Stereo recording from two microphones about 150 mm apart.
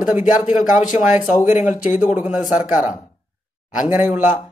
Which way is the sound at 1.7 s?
60° left (ahead or behind).